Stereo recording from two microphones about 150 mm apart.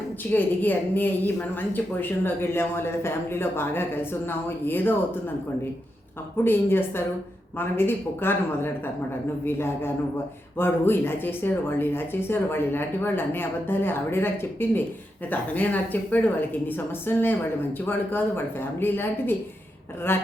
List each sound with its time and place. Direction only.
0.3 s a woman's voice: 10° left (ahead or behind)
6.4 s a woman's voice: 15° left (ahead or behind)